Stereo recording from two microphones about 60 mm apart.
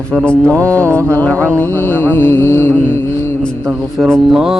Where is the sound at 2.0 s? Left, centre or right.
Left.